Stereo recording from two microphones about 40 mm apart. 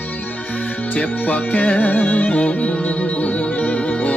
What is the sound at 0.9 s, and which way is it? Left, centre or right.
Music, left.